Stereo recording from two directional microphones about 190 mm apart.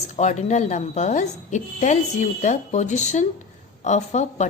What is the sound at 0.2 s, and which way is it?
A woman's voice, 40° left (ahead or behind).